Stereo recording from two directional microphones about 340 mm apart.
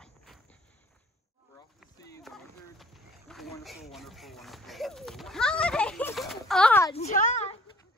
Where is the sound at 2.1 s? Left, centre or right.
Centre.